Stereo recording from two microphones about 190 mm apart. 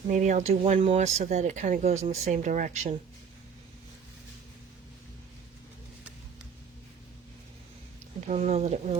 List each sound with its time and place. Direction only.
0.1 s speech: 40° right (ahead or behind)
8.3 s speech: 35° right (ahead or behind)